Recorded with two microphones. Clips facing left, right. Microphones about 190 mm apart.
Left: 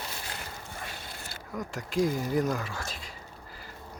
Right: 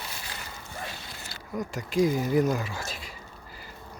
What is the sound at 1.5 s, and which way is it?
Speech, centre (ahead or behind).